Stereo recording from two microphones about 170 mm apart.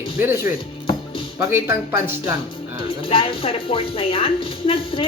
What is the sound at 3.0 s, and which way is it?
Speech, 30° left (ahead or behind).